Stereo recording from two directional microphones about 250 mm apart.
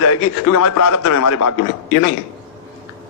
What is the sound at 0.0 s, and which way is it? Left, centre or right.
A man's voice, left.